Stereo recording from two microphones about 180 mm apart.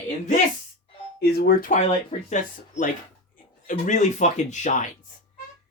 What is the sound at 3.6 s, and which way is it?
Speech, 45° left (ahead or behind).